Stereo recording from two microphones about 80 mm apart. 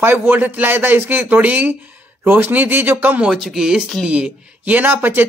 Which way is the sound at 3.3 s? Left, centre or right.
Centre.